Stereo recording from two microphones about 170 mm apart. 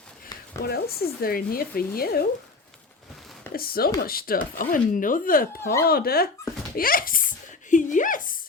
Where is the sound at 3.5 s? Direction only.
60° left (ahead or behind).